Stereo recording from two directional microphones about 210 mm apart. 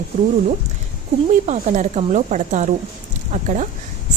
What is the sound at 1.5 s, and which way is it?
Speech, 35° right (ahead or behind).